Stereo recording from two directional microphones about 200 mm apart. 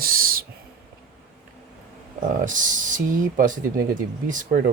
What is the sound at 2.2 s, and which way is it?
Speech, 40° right (ahead or behind).